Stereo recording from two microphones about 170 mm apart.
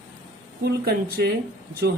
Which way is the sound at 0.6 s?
65° right (ahead or behind).